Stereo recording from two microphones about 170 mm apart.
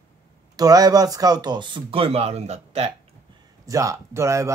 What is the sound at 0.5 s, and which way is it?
Speech, 20° right (ahead or behind).